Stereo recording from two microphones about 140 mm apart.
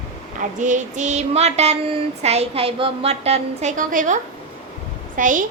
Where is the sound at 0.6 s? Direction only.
65° right (ahead or behind).